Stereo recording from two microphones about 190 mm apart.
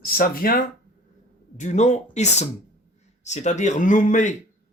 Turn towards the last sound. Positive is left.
turn(degrees=40)  # may be behind; listen again after turning